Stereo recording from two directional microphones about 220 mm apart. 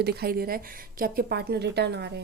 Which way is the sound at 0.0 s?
45° right (ahead or behind).